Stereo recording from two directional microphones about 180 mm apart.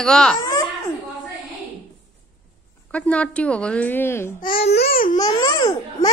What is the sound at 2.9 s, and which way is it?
Speech, 5° left (ahead or behind).